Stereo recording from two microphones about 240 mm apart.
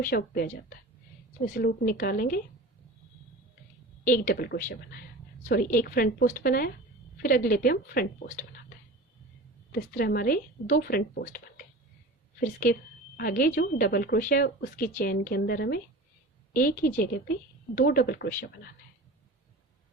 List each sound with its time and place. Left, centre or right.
0.0 s speech: left
1.5 s speech: left
4.0 s speech: left
9.7 s speech: left